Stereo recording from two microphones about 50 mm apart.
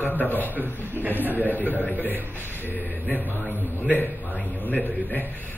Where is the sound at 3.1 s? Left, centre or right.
Left.